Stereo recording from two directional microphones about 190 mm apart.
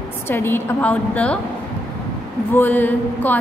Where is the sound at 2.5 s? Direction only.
10° left (ahead or behind).